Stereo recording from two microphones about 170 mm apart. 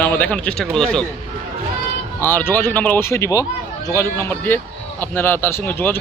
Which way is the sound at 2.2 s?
10° left (ahead or behind).